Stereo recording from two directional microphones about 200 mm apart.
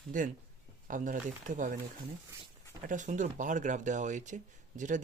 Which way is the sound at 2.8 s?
40° right (ahead or behind).